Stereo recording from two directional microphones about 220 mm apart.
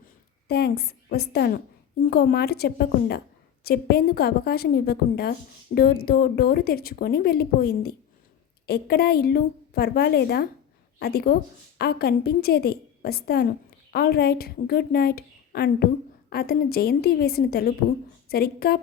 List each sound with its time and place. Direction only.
0.4 s a woman's voice: 45° left (ahead or behind)